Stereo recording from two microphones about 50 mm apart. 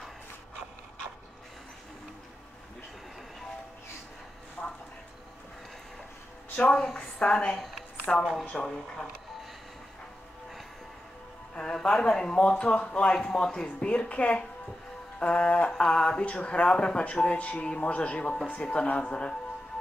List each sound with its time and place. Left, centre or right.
4.6 s a sound: left
6.7 s speech: centre
7.2 s speech: left
7.5 s speech: centre
8.1 s speech: left
11.5 s speech: centre